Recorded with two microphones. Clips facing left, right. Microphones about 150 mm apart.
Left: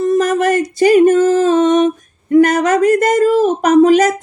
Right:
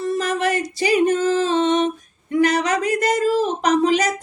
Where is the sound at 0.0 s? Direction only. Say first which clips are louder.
Left 8 dB; 45° left (ahead or behind).